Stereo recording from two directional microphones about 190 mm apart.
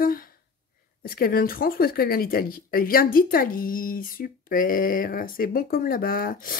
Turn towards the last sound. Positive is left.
turn(degrees=50)  # may be behind; listen again after turning